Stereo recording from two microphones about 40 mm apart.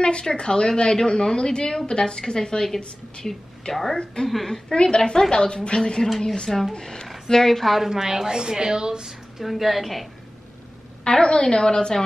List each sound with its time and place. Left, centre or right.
0.0 s a woman's voice: left
7.9 s a woman's voice: centre
9.4 s a woman's voice: centre
11.1 s a woman's voice: centre